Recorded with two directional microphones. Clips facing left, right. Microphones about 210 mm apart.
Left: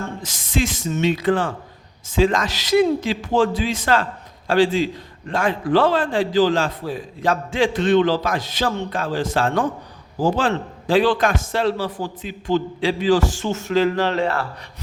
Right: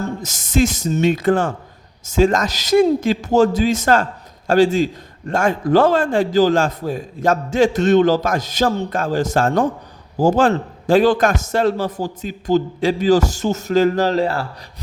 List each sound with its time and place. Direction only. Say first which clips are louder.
0.2 s a man's voice: right 6 dB; 45° right (ahead or behind)